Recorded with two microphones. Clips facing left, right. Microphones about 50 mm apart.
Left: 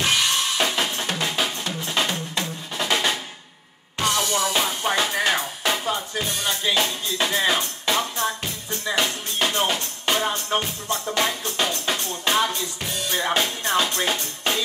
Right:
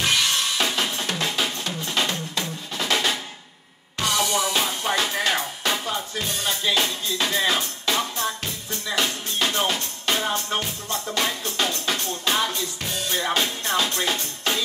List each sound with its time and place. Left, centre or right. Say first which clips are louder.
0.0 s drum kit: left 1 dB; centre
1.4 s drum: left 1 dB; centre
4.2 s music: even; centre
4.6 s music: left 1 dB; centre